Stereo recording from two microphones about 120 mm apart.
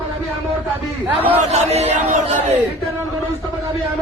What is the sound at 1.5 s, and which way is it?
Speech, 65° right (ahead or behind).